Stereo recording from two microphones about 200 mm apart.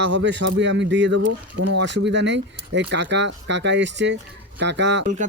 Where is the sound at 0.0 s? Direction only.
60° right (ahead or behind).